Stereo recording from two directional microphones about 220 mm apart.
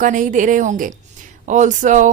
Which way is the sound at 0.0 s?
35° right (ahead or behind).